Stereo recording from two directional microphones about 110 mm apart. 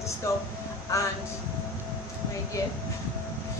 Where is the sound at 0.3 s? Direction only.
30° left (ahead or behind).